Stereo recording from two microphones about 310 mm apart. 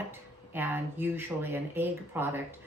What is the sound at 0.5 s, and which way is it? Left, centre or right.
Speech, centre.